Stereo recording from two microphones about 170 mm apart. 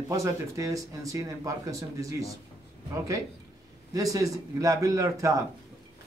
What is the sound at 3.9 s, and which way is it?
Speech, 20° right (ahead or behind).